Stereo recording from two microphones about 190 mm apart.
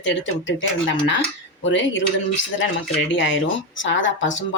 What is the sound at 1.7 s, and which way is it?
Speech, 80° left.